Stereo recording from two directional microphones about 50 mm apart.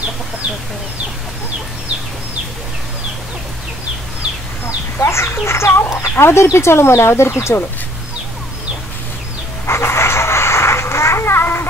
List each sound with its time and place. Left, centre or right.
4.9 s chicken: left
6.2 s speech: left
9.7 s a sound: left